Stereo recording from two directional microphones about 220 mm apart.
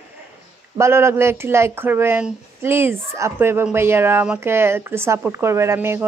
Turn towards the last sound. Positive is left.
turn(degrees=-10)  # may be behind; listen again after turning